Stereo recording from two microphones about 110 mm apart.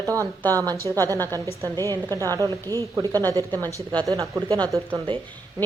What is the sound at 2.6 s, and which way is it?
Speech, 25° left (ahead or behind).